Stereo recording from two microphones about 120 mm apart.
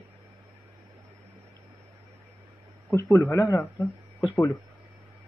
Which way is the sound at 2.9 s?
20° left (ahead or behind).